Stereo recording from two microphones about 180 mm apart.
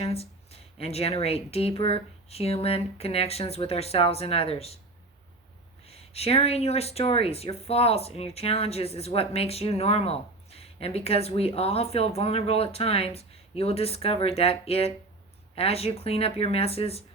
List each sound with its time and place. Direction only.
0.0 s speech: 35° left (ahead or behind)
5.8 s speech: 35° left (ahead or behind)